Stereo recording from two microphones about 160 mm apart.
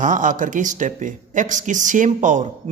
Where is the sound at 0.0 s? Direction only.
55° right (ahead or behind).